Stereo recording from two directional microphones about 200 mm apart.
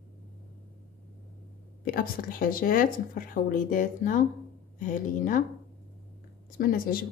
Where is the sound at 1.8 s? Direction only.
45° left (ahead or behind).